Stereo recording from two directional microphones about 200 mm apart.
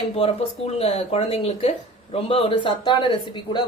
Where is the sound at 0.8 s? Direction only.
30° left (ahead or behind).